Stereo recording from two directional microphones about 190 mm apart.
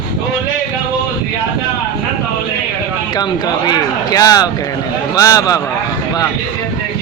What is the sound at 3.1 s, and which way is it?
Speech, 20° left (ahead or behind).